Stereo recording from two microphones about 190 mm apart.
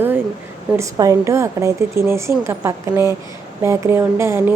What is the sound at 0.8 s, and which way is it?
A woman's voice, 15° right (ahead or behind).